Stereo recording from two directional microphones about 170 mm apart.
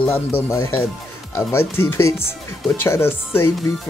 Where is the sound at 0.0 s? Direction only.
15° left (ahead or behind).